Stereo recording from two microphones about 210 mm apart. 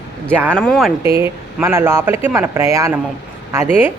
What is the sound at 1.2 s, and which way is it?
Speech, 10° right (ahead or behind).